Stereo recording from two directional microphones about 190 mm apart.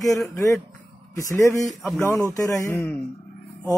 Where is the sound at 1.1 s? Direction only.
15° left (ahead or behind).